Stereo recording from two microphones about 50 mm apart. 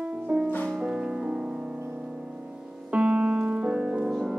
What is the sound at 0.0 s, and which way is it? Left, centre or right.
Music, right.